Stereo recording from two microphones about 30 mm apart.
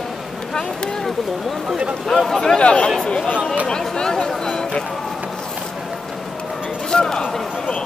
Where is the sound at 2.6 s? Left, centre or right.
Left.